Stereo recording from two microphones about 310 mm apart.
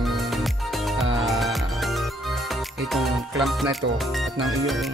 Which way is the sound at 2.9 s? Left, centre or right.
Centre.